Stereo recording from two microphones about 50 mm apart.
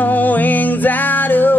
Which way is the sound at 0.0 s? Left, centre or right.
Left.